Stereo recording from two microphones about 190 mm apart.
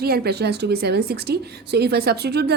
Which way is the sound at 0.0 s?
55° right (ahead or behind).